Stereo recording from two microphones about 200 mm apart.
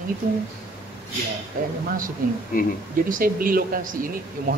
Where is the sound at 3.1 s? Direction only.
45° right (ahead or behind).